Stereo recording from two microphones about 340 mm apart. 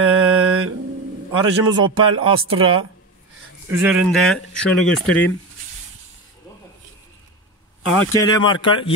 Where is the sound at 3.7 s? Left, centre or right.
Centre.